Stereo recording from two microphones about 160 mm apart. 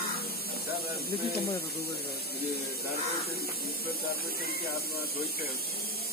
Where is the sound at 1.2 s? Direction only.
75° left (ahead or behind).